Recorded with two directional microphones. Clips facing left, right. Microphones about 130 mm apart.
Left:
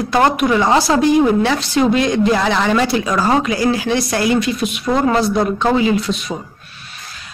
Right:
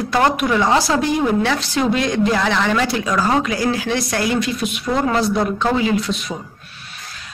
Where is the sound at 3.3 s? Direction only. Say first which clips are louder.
Left 3 dB; 15° left (ahead or behind).